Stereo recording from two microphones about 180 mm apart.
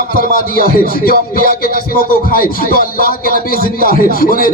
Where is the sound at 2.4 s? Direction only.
55° left (ahead or behind).